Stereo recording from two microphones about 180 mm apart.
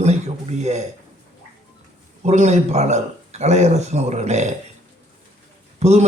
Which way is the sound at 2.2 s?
40° right (ahead or behind).